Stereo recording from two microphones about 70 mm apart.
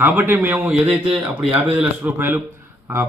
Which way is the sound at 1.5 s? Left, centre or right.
Centre.